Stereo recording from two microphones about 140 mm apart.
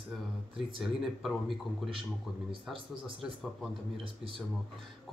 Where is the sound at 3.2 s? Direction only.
Centre (ahead or behind).